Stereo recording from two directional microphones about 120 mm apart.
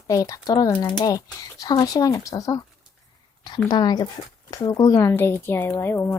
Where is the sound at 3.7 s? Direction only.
35° left (ahead or behind).